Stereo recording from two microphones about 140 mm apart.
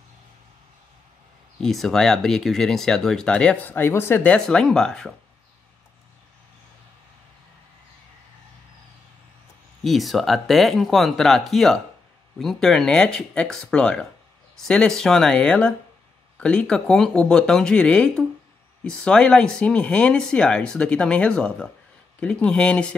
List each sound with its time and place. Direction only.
1.6 s speech: centre (ahead or behind)
9.8 s speech: centre (ahead or behind)